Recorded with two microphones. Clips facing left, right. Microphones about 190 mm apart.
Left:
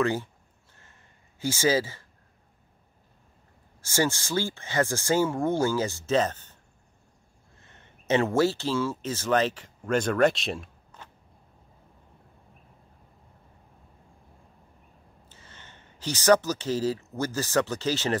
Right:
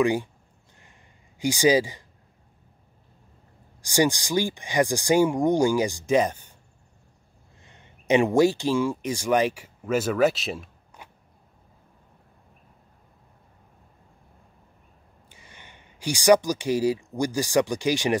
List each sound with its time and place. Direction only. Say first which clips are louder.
0.0 s speech: right 4 dB; 15° right (ahead or behind)
1.4 s speech: right 4 dB; 15° right (ahead or behind)
3.8 s speech: right 4 dB; 15° right (ahead or behind)
7.6 s speech: right 3 dB; 15° right (ahead or behind)
11.0 s a sound: right 1 dB; 10° right (ahead or behind)
15.2 s speech: right 2 dB; 15° right (ahead or behind)